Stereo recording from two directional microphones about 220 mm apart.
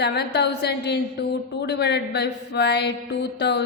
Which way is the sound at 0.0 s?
50° left (ahead or behind).